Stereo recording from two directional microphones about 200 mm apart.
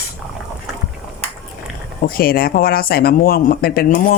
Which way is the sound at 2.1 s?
45° left (ahead or behind).